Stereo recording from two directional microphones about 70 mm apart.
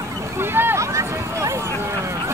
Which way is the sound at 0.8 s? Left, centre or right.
Right.